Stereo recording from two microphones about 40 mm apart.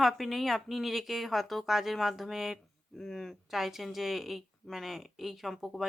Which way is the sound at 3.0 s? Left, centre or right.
Centre.